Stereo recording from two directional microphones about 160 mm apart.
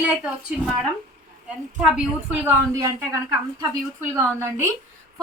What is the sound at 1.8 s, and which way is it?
A woman's voice, 5° right (ahead or behind).